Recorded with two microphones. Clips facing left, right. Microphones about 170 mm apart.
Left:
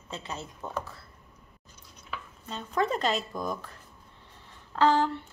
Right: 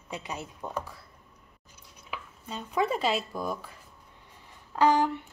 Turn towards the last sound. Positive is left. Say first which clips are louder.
# even
turn(degrees=-15)  # may be behind; listen again after turning